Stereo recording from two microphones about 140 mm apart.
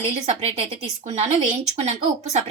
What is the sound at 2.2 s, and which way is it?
Speech, 55° right (ahead or behind).